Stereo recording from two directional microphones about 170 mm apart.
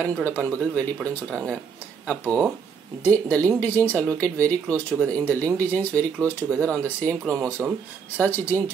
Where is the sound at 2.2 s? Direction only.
5° right (ahead or behind).